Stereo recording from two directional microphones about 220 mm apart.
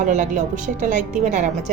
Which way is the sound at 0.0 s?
35° right (ahead or behind).